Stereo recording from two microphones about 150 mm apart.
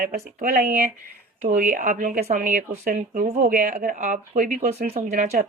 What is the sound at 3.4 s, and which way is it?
Speech, 60° right (ahead or behind).